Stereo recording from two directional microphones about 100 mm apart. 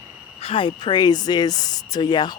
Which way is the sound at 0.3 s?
65° left (ahead or behind).